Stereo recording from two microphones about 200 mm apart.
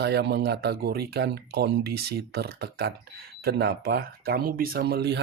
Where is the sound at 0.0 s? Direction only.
55° right (ahead or behind).